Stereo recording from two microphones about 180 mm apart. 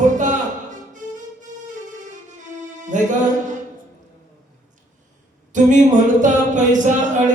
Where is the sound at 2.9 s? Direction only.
45° right (ahead or behind).